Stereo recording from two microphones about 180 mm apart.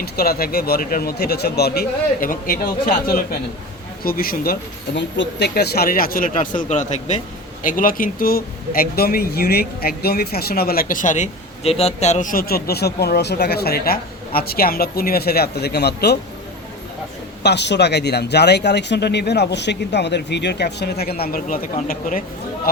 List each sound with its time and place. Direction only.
0.0 s speech: 60° left (ahead or behind)
4.9 s speech: 85° left; by 16.1 s 65° left (ahead or behind)
17.4 s speech: 75° left (ahead or behind); by 22.2 s 50° left (ahead or behind)